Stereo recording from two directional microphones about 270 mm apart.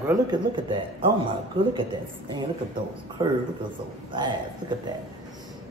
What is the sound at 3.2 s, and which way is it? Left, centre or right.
Speech, centre.